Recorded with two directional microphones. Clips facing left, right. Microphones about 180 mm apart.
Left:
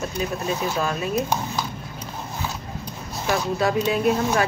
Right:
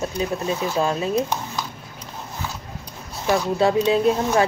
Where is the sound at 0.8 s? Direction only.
25° right (ahead or behind).